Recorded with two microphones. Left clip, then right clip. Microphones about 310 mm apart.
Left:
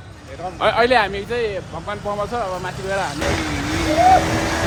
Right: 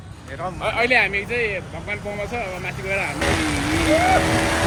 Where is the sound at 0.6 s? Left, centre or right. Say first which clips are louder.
Left 3 dB; left.